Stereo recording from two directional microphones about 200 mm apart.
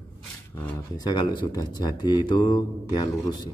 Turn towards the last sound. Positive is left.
turn(degrees=20)  # may be behind; listen again after turning